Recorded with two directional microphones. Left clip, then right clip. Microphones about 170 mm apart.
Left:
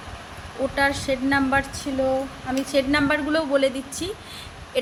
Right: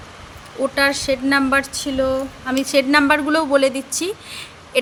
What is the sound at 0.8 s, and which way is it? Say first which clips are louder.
A woman's voice: right 4 dB; 35° right (ahead or behind).